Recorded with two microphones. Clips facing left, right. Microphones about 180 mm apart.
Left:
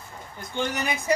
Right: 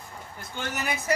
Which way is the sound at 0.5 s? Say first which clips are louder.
Left 4 dB; 15° left (ahead or behind).